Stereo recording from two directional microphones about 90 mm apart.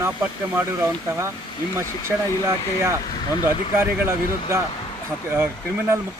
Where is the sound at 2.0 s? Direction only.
30° right (ahead or behind).